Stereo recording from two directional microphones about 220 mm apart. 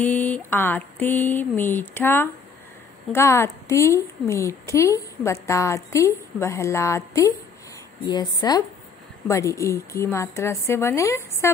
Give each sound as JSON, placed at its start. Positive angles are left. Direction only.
{"t": 0.0, "sound": "a woman's voice", "side_deg": 10}